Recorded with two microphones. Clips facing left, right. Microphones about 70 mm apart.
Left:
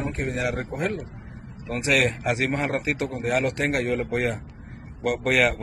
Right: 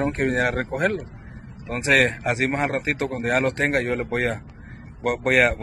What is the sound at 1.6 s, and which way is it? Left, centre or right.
A man's voice, right.